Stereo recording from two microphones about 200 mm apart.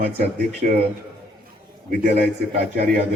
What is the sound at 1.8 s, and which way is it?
A man's voice, 50° right (ahead or behind).